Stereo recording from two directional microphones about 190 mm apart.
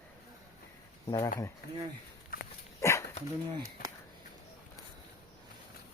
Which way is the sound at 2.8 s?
15° left (ahead or behind).